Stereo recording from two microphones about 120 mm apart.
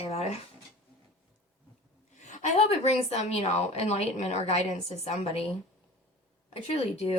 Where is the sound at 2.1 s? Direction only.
80° left; by 5.4 s 60° left (ahead or behind).